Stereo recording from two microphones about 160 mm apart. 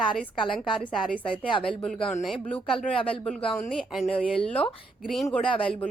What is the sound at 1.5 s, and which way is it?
Speech, 30° left (ahead or behind).